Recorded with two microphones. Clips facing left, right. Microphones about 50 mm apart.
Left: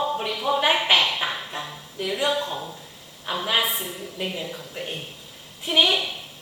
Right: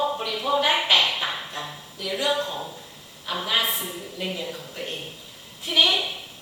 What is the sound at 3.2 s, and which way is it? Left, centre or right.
A woman's voice, left.